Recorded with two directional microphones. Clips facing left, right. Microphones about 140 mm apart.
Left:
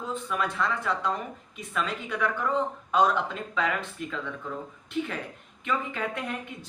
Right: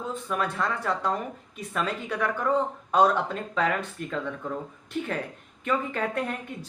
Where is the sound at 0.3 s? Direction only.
35° right (ahead or behind).